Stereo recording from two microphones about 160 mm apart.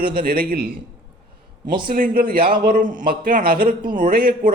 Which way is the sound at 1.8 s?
65° right (ahead or behind).